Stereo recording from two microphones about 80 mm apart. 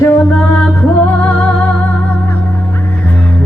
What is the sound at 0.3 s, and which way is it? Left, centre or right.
Music, centre.